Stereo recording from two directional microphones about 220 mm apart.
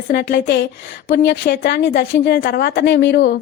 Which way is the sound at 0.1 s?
45° left (ahead or behind).